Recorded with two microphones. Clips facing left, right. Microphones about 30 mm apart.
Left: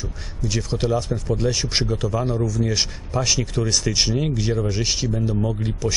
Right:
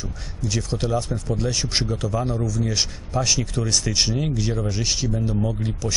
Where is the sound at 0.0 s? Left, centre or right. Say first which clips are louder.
Left 1 dB; centre.